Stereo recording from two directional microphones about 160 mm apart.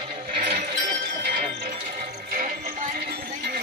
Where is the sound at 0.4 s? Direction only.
60° right (ahead or behind).